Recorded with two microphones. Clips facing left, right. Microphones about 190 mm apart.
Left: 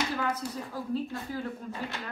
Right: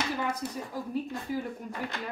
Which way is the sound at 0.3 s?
15° right (ahead or behind).